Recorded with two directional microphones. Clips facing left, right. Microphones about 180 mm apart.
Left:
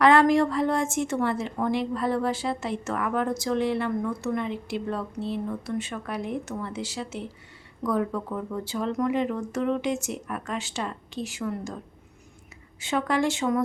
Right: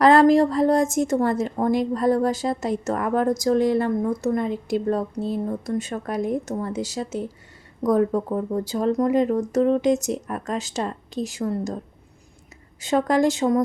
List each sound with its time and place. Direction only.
0.0 s a woman's voice: 35° right (ahead or behind)
12.8 s a woman's voice: 40° right (ahead or behind)